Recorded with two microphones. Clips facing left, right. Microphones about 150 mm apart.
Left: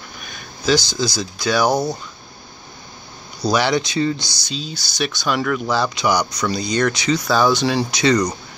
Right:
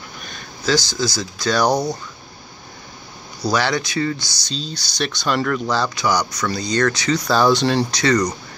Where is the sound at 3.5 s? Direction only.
20° left (ahead or behind).